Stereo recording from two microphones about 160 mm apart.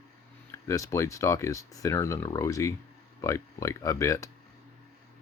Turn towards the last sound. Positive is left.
turn(degrees=20)  # may be behind; listen again after turning